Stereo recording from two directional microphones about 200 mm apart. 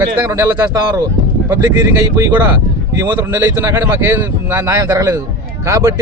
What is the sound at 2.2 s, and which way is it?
A man's voice, 10° right (ahead or behind).